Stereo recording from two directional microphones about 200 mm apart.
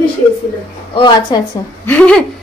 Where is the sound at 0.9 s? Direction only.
25° left (ahead or behind).